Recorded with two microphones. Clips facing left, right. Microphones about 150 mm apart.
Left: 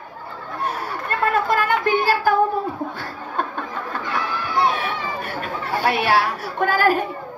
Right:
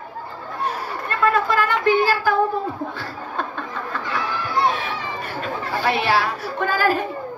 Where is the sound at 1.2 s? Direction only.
50° left (ahead or behind).